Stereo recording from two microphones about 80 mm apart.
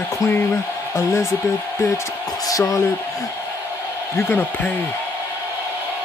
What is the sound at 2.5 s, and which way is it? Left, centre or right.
Speech, left.